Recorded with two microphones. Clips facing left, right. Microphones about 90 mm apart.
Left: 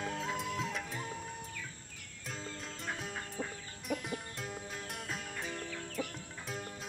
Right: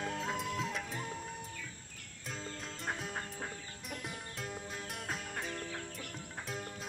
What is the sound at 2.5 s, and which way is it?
Music, centre (ahead or behind).